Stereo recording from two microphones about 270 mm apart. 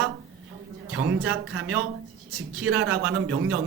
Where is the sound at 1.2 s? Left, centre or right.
Right.